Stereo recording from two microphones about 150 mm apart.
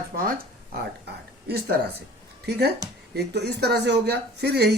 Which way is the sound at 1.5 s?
90° right.